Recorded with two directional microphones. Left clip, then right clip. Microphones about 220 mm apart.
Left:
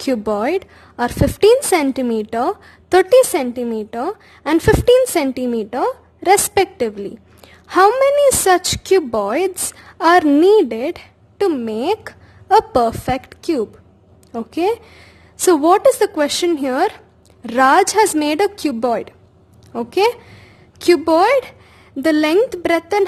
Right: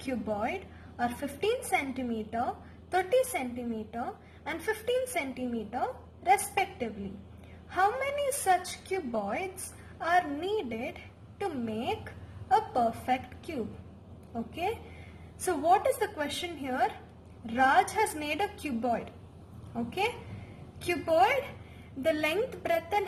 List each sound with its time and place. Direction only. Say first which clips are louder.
0.1 s a woman's voice: left 15 dB; 50° left (ahead or behind)
14.3 s a woman's voice: left 15 dB; 55° left (ahead or behind)